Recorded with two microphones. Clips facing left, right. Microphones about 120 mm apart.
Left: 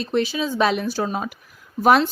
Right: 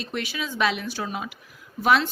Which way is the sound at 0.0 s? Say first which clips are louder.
Left 9 dB; 30° left (ahead or behind).